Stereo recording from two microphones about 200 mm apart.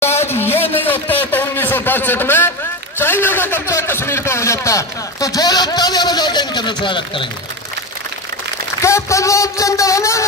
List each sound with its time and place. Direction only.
0.0 s a sound: 10° left (ahead or behind)
3.0 s a man's voice: 10° left (ahead or behind)
8.8 s a man's voice: 15° left (ahead or behind)